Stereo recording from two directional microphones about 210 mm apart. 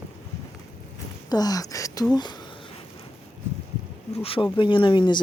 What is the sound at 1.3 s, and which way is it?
Speech, 20° left (ahead or behind).